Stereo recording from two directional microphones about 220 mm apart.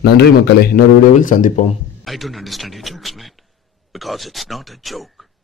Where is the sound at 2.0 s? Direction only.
Centre (ahead or behind).